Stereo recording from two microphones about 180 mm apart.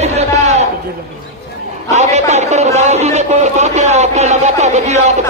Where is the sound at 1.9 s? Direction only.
40° right (ahead or behind).